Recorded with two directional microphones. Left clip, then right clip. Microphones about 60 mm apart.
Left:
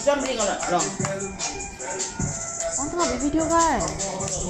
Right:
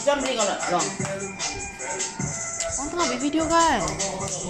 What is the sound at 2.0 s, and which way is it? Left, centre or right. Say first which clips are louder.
Music: even; left.